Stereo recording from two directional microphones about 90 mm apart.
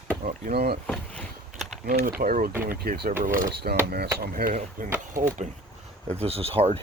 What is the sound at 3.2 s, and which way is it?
Speech, 30° right (ahead or behind).